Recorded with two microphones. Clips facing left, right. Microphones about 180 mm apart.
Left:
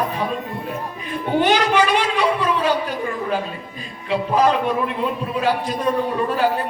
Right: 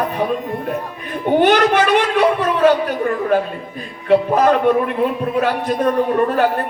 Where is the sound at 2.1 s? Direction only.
55° right (ahead or behind).